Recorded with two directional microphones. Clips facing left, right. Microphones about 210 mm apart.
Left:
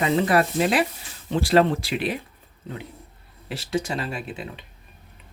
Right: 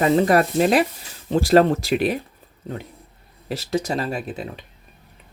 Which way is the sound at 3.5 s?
40° right (ahead or behind).